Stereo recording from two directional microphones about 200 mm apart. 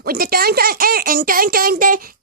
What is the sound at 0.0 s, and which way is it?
Speech, 45° right (ahead or behind).